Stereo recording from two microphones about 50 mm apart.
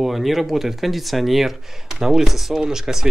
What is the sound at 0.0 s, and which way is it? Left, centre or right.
Speech, centre.